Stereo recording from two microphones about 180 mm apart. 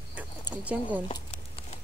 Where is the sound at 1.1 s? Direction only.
35° left (ahead or behind).